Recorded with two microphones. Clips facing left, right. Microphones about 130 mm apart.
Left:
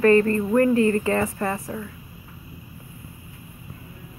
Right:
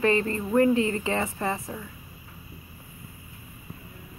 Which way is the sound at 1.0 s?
25° right (ahead or behind).